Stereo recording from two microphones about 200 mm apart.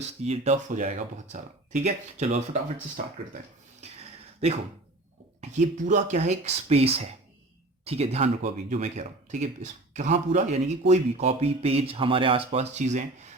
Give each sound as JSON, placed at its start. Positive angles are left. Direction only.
{"t": 0.0, "sound": "speech", "side_deg": -35}
{"t": 5.4, "sound": "speech", "side_deg": -35}